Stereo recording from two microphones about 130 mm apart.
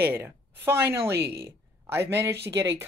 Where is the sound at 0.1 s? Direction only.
20° right (ahead or behind).